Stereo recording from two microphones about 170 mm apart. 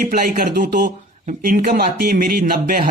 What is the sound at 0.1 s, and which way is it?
Speech, 60° right (ahead or behind).